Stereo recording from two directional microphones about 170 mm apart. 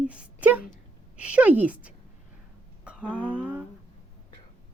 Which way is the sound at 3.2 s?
10° right (ahead or behind).